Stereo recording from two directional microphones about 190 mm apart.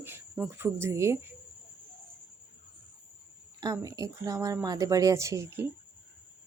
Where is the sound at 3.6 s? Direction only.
15° right (ahead or behind).